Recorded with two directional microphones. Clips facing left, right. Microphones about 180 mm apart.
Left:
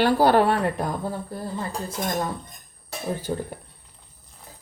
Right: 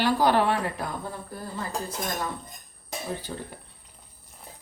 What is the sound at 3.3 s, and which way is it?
Speech, 30° left (ahead or behind).